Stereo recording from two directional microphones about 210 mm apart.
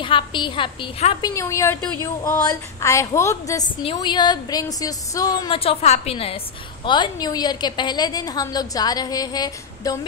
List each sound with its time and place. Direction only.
0.0 s a woman's voice: 25° left (ahead or behind)
1.2 s a woman's voice: 15° left (ahead or behind)